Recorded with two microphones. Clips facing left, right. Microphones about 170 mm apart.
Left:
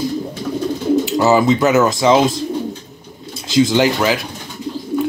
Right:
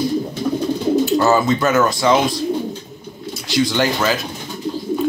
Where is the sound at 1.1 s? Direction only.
15° left (ahead or behind).